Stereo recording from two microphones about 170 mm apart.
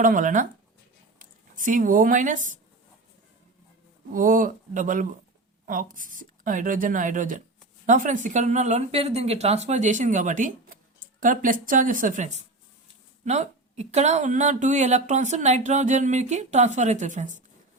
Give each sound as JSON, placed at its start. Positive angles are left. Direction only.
{"t": 0.0, "sound": "speech", "side_deg": -50}
{"t": 4.1, "sound": "speech", "side_deg": -50}